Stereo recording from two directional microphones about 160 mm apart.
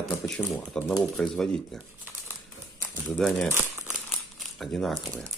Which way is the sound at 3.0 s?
5° left (ahead or behind).